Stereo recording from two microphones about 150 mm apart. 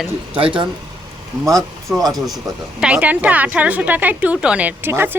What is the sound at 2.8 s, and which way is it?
A woman's voice, 10° right (ahead or behind).